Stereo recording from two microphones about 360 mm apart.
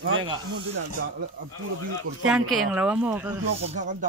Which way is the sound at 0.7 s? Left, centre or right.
Right.